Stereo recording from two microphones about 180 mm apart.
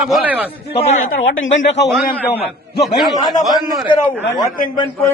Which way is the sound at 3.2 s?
20° left (ahead or behind).